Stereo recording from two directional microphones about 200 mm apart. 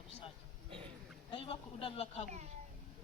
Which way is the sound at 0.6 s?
25° right (ahead or behind).